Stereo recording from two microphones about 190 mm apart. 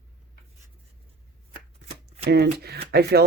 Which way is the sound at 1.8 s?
35° right (ahead or behind).